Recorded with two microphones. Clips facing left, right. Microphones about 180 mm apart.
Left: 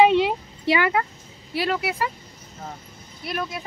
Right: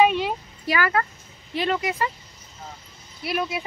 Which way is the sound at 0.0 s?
20° left (ahead or behind).